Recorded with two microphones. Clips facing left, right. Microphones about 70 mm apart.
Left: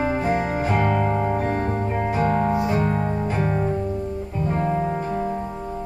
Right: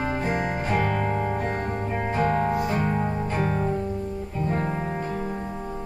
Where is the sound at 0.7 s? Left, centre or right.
Left.